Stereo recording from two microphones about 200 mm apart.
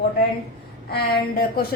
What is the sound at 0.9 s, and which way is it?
Speech, 50° left (ahead or behind).